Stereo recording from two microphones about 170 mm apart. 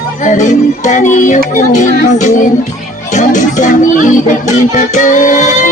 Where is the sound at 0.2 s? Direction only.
45° left (ahead or behind).